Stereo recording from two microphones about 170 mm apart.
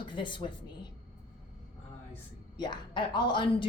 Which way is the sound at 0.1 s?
30° left (ahead or behind).